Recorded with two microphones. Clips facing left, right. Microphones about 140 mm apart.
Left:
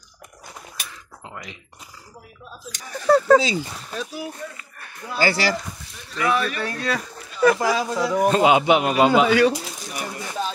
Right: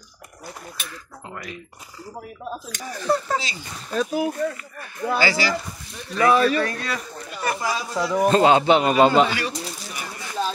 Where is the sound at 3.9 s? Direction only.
50° right (ahead or behind).